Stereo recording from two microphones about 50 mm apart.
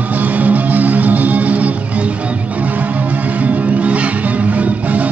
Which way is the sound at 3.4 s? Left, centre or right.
Right.